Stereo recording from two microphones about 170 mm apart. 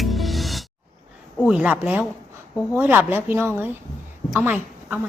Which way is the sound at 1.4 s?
5° right (ahead or behind).